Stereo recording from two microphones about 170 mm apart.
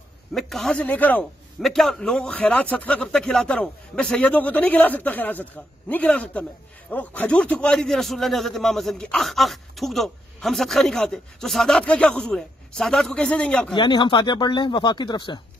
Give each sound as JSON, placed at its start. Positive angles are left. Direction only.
{"t": 0.3, "sound": "a man's voice", "side_deg": 0}
{"t": 13.7, "sound": "speech", "side_deg": 25}